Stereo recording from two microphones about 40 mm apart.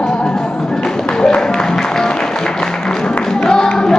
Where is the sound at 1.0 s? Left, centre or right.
Left.